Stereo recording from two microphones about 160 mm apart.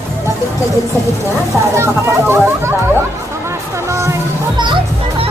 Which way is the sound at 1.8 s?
15° right (ahead or behind).